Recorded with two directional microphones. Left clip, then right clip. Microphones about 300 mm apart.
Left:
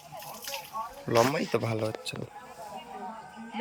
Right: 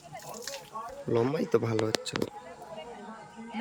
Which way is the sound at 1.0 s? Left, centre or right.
Centre.